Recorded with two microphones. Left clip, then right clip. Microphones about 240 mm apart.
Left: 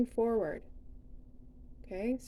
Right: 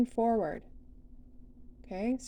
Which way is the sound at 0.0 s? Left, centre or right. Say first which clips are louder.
Right 2 dB; centre.